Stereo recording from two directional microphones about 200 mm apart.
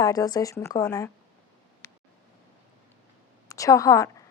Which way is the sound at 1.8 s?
15° left (ahead or behind).